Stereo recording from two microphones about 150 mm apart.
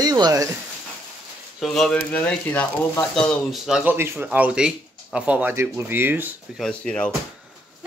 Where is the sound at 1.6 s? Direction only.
5° left (ahead or behind).